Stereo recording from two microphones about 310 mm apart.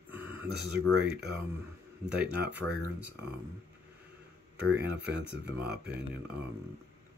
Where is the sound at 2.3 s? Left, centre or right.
Centre.